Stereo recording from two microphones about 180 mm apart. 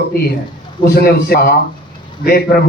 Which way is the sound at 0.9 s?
60° left (ahead or behind).